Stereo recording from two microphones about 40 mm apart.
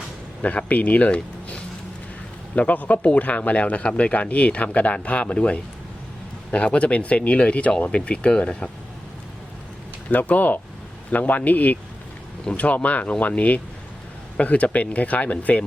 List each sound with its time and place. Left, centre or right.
0.4 s speech: left
1.1 s a sound: left
2.6 s speech: left
10.1 s speech: left
12.5 s speech: left